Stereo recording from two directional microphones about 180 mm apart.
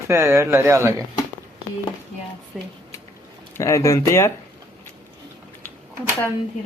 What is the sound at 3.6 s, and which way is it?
Speech, 15° left (ahead or behind).